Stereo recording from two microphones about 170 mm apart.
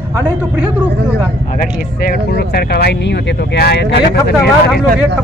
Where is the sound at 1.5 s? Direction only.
60° left (ahead or behind); by 4.5 s 80° left.